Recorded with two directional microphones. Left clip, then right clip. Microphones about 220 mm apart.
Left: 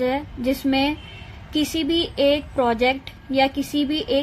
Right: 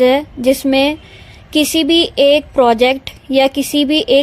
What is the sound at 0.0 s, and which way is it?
Speech, 40° right (ahead or behind).